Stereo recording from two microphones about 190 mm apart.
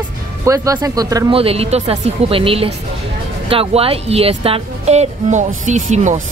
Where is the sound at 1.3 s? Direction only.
30° right (ahead or behind).